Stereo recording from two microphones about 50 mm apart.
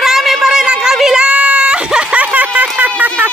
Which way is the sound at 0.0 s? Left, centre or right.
Centre.